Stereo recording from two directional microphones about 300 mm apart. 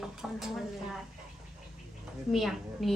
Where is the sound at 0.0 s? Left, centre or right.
Centre.